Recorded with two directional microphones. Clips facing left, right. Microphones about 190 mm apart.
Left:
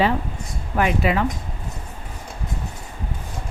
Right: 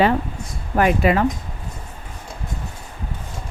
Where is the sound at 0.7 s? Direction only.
45° right (ahead or behind).